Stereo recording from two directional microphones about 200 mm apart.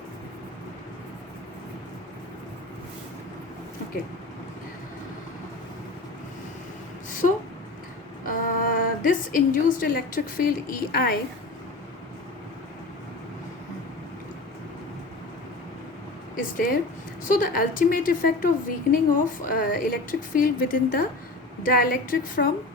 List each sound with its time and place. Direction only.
7.1 s a sound: 40° left (ahead or behind)
8.2 s a woman's voice: 45° left (ahead or behind)
17.2 s a woman's voice: 45° left (ahead or behind)